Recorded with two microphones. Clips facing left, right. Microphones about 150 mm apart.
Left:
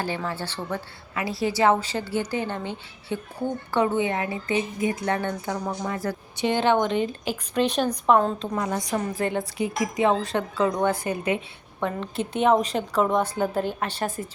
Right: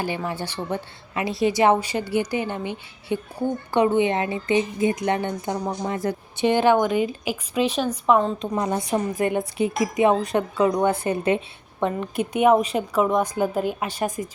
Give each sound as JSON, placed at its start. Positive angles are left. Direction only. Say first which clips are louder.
{"t": 0.0, "sound": "a woman's voice", "louder": "right 2 dB", "side_deg": -15}
{"t": 8.4, "sound": "a woman's voice", "louder": "right 3 dB", "side_deg": -20}
{"t": 11.0, "sound": "speech", "louder": "right 4 dB", "side_deg": -30}
{"t": 11.8, "sound": "a woman's voice", "louder": "right 3 dB", "side_deg": -15}